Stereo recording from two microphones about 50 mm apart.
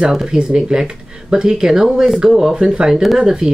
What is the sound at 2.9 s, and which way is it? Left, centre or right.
Speech, centre.